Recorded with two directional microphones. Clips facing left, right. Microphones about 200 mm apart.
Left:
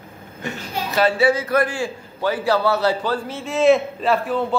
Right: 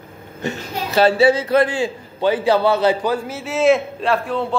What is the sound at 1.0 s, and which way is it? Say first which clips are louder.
A man's voice: right 4 dB; 25° right (ahead or behind).